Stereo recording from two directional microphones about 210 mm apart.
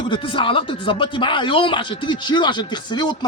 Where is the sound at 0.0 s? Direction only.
25° left (ahead or behind).